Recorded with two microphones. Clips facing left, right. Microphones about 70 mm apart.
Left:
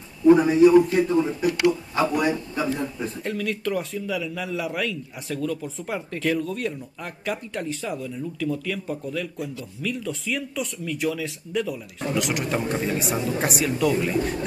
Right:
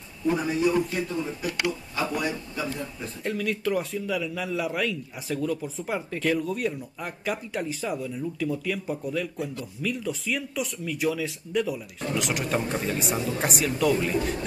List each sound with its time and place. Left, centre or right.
0.3 s a man's voice: left
3.3 s a man's voice: centre